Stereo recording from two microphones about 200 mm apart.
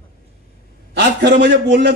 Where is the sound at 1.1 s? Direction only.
60° right (ahead or behind).